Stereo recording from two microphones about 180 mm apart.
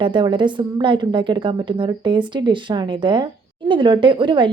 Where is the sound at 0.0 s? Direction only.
25° right (ahead or behind).